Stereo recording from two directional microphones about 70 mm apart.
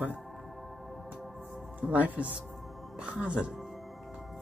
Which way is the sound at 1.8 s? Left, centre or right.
Right.